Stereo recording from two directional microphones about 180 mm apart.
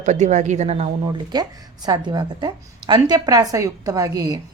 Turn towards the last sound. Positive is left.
turn(degrees=-20)  # may be behind; listen again after turning